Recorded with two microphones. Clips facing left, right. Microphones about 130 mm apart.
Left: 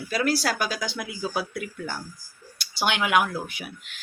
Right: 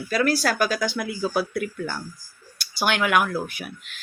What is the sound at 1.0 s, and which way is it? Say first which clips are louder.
Speech: right 5 dB; 55° right (ahead or behind).